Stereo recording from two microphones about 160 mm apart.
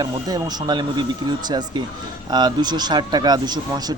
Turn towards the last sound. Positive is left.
turn(degrees=-25)  # may be behind; listen again after turning